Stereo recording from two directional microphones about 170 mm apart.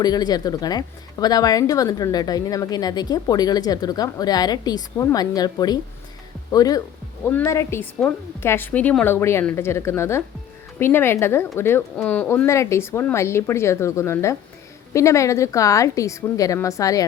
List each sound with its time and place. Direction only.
0.0 s a woman's voice: 25° left (ahead or behind)